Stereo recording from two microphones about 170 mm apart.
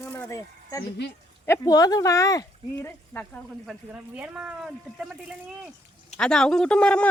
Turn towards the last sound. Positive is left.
turn(degrees=5)  # may be behind; listen again after turning